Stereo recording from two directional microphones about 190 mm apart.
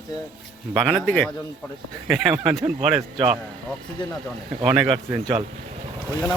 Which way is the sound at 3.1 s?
30° right (ahead or behind).